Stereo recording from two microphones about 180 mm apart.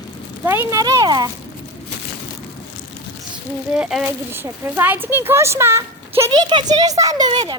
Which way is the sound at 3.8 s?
5° right (ahead or behind).